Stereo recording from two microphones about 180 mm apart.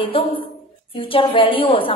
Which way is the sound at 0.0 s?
30° left (ahead or behind).